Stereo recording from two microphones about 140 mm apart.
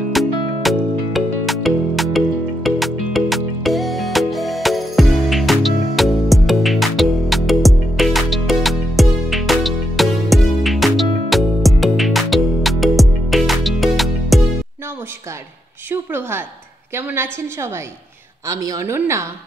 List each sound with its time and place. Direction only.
0.1 s music: centre (ahead or behind)
15.9 s a woman's voice: 15° right (ahead or behind)